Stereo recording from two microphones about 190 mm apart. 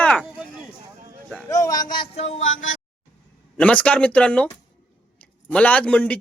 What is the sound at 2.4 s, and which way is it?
Speech, 90° left.